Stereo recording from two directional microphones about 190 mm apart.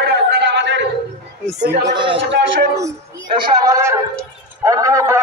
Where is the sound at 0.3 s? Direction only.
65° right (ahead or behind).